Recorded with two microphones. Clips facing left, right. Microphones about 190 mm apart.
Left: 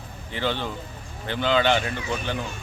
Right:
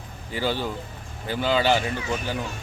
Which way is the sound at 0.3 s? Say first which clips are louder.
Right 1 dB; 10° right (ahead or behind).